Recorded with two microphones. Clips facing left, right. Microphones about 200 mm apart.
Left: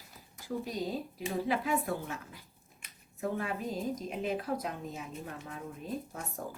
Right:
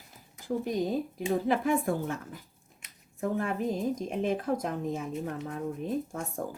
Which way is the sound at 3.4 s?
50° right (ahead or behind).